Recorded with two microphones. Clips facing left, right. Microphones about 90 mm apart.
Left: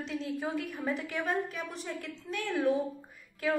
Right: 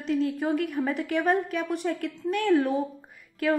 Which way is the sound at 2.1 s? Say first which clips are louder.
Right 11 dB; 55° right (ahead or behind).